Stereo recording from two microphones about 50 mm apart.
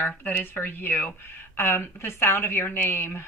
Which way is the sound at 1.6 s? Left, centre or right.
Left.